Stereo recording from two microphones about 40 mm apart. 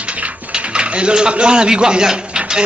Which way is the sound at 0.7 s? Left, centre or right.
Right.